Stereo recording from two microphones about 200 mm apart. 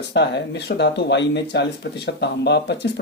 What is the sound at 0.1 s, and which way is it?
Speech, 60° left (ahead or behind).